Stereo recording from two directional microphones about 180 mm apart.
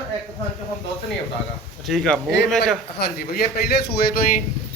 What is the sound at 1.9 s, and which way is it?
Speech, centre (ahead or behind).